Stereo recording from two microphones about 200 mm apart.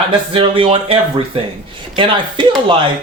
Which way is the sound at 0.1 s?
25° right (ahead or behind).